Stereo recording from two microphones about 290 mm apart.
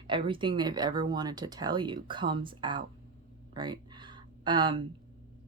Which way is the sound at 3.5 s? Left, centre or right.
Centre.